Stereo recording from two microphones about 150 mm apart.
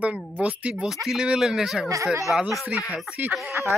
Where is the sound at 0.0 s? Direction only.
10° right (ahead or behind).